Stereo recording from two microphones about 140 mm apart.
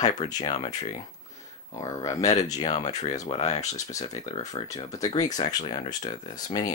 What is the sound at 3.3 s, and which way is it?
Speech, 40° left (ahead or behind).